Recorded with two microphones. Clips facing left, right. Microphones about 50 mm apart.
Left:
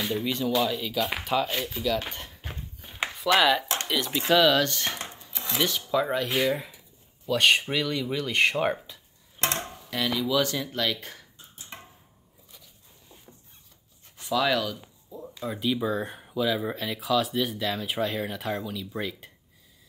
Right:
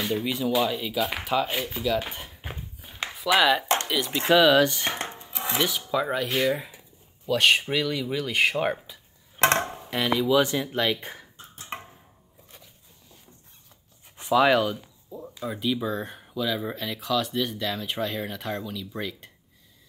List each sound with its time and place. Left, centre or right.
0.0 s speech: centre
5.1 s dishes: right
5.6 s speech: centre
9.4 s a sound: right
9.7 s speech: right
11.3 s cough: right
14.1 s speech: right
15.0 s speech: centre